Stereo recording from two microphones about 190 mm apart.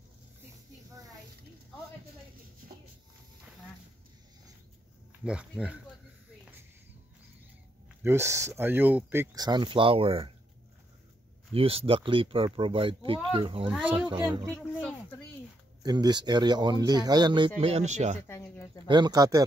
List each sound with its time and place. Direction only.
5.2 s speech: 5° right (ahead or behind)
8.0 s speech: 15° right (ahead or behind); by 10.3 s 30° right (ahead or behind)
11.5 s speech: 30° right (ahead or behind)
14.5 s speech: 5° left (ahead or behind)
15.8 s speech: 20° right (ahead or behind); by 18.1 s 35° right (ahead or behind)
18.2 s a sound: 15° left (ahead or behind)
18.9 s speech: 20° right (ahead or behind)